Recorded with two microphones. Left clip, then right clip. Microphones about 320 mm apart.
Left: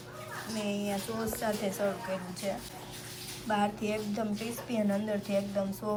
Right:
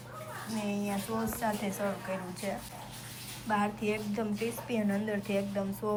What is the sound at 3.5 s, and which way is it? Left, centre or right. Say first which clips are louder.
A woman's voice: even; centre.